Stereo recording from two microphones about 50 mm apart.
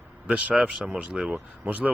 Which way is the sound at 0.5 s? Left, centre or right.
Centre.